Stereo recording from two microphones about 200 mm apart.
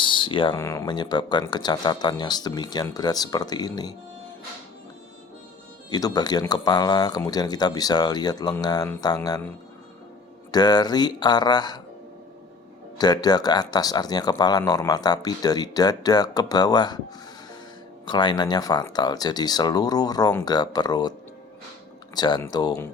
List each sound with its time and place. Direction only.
0.0 s a sound: 25° left (ahead or behind)
0.5 s speech: 15° left (ahead or behind)
5.9 s speech: 20° left (ahead or behind)
10.5 s speech: 20° left (ahead or behind)
13.0 s speech: 20° left (ahead or behind)
18.0 s speech: 25° left (ahead or behind)
22.1 s speech: 20° left (ahead or behind)